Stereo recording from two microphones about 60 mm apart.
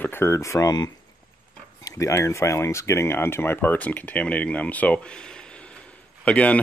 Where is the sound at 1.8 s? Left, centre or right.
Left.